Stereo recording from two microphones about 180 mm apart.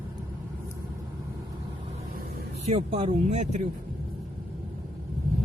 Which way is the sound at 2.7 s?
35° right (ahead or behind).